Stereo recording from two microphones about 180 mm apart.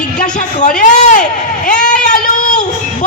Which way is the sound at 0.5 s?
45° left (ahead or behind).